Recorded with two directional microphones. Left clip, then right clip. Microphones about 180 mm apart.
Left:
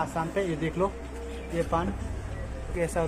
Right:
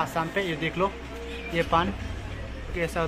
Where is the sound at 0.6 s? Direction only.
20° left (ahead or behind).